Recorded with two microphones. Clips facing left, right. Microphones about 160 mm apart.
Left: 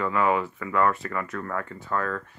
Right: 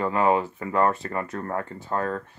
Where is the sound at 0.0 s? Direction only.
30° right (ahead or behind).